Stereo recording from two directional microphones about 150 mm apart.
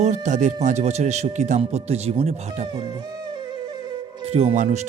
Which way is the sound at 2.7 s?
30° right (ahead or behind).